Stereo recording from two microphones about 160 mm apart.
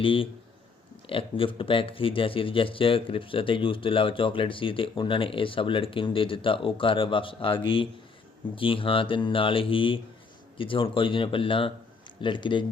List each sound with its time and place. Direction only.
0.0 s speech: 35° left (ahead or behind)